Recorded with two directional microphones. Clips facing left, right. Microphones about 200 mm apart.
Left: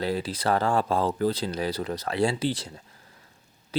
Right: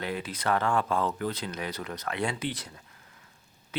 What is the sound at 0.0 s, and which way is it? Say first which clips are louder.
Speech: left 5 dB; 35° left (ahead or behind).